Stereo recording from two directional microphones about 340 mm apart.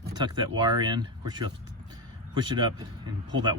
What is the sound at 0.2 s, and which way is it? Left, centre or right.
Speech, centre.